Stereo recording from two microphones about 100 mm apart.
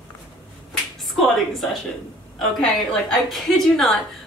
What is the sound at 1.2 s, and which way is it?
A woman's voice, centre (ahead or behind).